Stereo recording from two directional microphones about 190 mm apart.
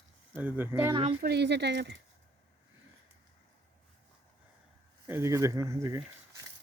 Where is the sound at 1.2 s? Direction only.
60° right (ahead or behind).